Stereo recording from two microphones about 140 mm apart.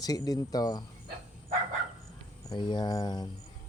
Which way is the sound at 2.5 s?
30° left (ahead or behind).